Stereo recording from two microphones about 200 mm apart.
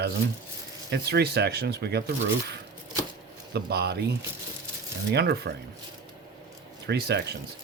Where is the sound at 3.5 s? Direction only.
55° right (ahead or behind).